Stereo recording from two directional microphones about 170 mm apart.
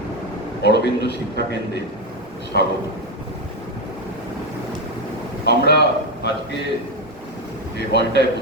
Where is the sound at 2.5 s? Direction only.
75° left (ahead or behind).